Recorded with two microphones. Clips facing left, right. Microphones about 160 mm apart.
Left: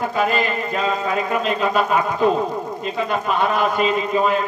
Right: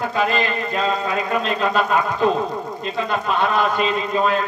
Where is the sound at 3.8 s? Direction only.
10° left (ahead or behind).